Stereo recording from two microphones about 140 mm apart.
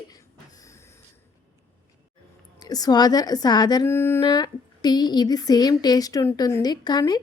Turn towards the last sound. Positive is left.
turn(degrees=30)  # may be behind; listen again after turning